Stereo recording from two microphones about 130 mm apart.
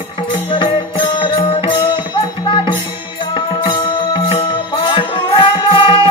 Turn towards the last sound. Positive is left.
turn(degrees=40)  # may be behind; listen again after turning